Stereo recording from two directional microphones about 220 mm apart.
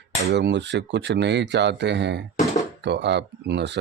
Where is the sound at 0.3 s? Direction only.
50° right (ahead or behind).